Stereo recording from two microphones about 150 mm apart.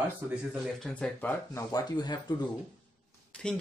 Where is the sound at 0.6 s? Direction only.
5° left (ahead or behind).